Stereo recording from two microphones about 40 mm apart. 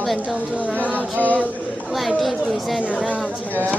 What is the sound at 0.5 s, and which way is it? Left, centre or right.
Speech, left.